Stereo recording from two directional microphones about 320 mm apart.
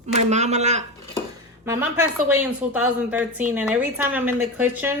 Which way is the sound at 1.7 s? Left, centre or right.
Centre.